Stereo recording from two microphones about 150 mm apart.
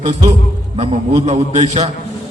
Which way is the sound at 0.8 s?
40° right (ahead or behind).